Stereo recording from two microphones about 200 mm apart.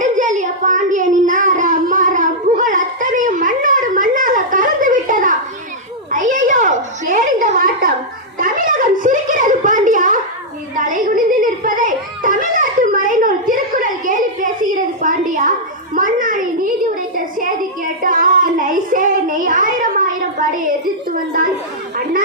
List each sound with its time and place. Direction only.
0.0 s child singing: 40° right (ahead or behind)
6.1 s a sound: 40° right (ahead or behind)
16.9 s child singing: 45° right (ahead or behind)